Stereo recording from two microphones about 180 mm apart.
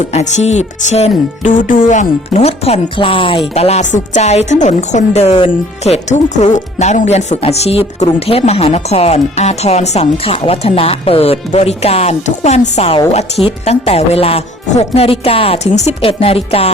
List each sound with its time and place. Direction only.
0.1 s speech: 40° left (ahead or behind)